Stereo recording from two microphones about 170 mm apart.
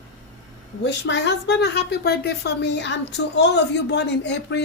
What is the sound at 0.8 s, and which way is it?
A woman's voice, 90° left.